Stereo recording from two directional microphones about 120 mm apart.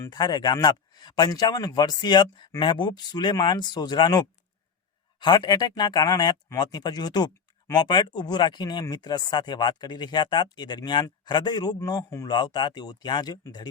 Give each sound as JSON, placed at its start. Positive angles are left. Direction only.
{"t": 0.1, "sound": "speech", "side_deg": 35}